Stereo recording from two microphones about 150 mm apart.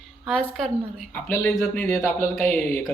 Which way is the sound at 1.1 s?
15° left (ahead or behind).